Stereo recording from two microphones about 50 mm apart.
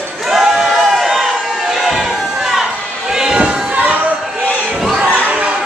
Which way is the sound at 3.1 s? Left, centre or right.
Centre.